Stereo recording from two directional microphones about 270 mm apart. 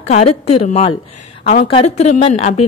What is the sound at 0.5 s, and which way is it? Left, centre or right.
Speech, left.